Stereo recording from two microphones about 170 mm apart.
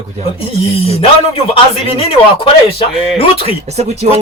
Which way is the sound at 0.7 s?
35° left (ahead or behind).